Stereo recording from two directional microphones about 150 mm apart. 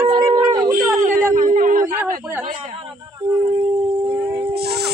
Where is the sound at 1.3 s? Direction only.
60° right (ahead or behind).